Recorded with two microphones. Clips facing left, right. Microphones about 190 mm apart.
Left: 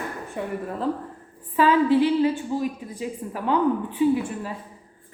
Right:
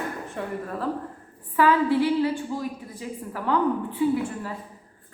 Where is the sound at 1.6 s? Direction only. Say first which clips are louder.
Left 2 dB; 20° left (ahead or behind).